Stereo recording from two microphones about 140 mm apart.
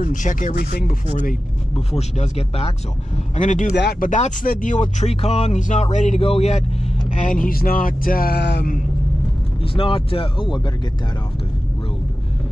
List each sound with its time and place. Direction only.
0.0 s speech: 65° left (ahead or behind); by 0.9 s 80° left
1.9 s speech: 50° left (ahead or behind)
3.3 s speech: 60° left (ahead or behind)
7.1 s speech: 65° left (ahead or behind); by 8.8 s 90° left
9.6 s speech: 40° left (ahead or behind)